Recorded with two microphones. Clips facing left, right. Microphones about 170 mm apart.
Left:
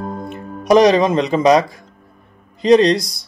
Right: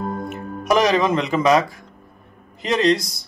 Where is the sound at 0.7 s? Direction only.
35° left (ahead or behind).